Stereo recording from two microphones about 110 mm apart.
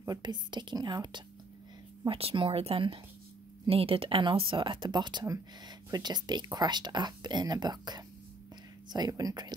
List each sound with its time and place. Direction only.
0.2 s speech: 45° right (ahead or behind)
2.0 s speech: 55° right (ahead or behind); by 5.2 s 40° right (ahead or behind)
5.2 s speech: 30° right (ahead or behind)